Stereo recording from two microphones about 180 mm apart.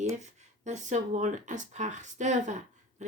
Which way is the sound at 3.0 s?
40° right (ahead or behind).